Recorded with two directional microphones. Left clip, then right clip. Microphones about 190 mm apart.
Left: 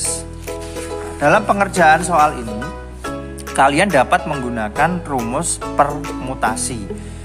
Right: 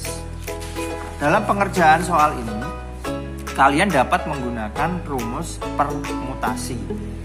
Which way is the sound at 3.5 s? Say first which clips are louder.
Left 3 dB; 35° left (ahead or behind).